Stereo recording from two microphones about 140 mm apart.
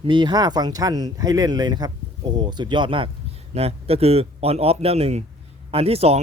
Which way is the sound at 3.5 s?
50° right (ahead or behind).